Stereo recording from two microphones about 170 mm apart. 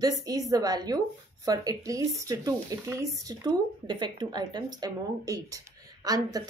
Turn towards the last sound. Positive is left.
turn(degrees=-20)  # may be behind; listen again after turning